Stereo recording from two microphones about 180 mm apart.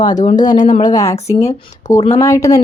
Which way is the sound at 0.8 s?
20° left (ahead or behind).